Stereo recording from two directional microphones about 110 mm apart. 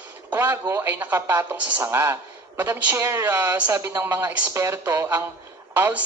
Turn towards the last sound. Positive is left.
turn(degrees=-15)  # may be behind; listen again after turning